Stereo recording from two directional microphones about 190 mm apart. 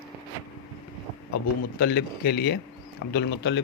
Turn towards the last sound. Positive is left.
turn(degrees=65)  # may be behind; listen again after turning